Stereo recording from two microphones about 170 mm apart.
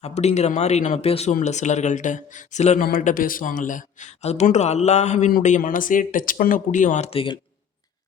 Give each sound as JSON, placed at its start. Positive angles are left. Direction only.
{"t": 0.0, "sound": "speech", "side_deg": 40}